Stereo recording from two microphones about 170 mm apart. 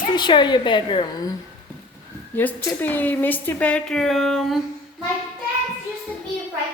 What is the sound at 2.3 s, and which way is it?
A woman's voice, 10° left (ahead or behind).